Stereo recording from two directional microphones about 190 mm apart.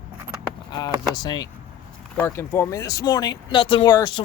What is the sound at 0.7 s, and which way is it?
Speech, 20° left (ahead or behind).